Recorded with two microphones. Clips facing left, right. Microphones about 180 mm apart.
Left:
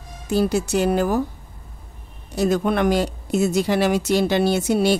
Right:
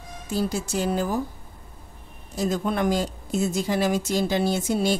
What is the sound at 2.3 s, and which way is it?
Speech, 70° left (ahead or behind).